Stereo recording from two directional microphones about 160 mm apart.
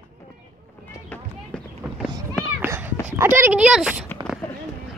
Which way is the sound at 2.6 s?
10° right (ahead or behind).